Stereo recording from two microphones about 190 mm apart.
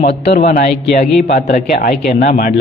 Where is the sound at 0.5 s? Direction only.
40° left (ahead or behind).